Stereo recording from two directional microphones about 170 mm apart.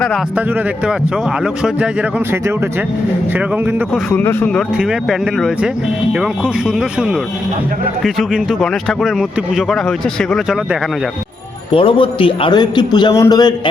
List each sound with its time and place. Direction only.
1.6 s speech: 5° right (ahead or behind)
4.1 s speech: 15° left (ahead or behind)
4.5 s speech: centre (ahead or behind)
11.7 s a man's voice: 30° left (ahead or behind)